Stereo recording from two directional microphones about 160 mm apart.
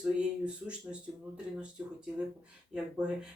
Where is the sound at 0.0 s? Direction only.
5° right (ahead or behind).